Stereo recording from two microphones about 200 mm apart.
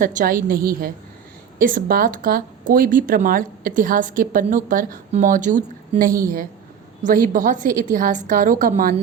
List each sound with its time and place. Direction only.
0.0 s a woman's voice: 40° right (ahead or behind)